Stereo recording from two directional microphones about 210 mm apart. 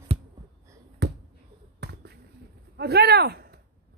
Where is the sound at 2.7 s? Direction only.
50° right (ahead or behind).